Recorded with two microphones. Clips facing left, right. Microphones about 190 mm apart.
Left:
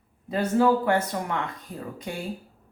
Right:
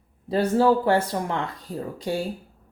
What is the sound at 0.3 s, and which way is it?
Speech, 30° right (ahead or behind).